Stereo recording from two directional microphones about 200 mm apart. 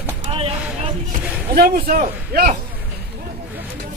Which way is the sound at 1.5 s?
45° right (ahead or behind).